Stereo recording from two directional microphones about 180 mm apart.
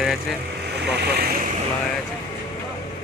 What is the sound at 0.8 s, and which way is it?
Speech, 65° right (ahead or behind).